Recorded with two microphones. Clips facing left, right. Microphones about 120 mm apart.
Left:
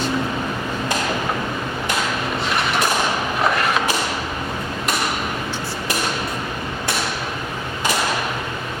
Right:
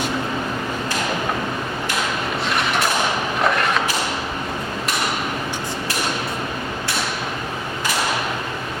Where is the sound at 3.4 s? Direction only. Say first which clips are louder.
Even; centre (ahead or behind).